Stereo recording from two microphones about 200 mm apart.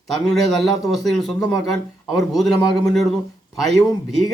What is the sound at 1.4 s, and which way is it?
Speech, 20° left (ahead or behind).